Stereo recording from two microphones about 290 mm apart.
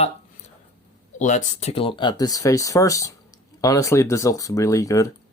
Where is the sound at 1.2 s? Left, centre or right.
Left.